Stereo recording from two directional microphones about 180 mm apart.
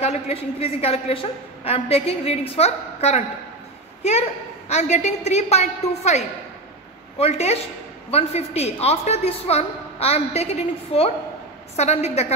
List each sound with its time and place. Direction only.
0.0 s a woman's voice: 35° left (ahead or behind)
4.6 s a woman's voice: 40° left (ahead or behind)